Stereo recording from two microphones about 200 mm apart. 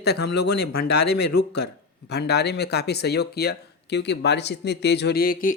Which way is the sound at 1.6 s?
55° left (ahead or behind).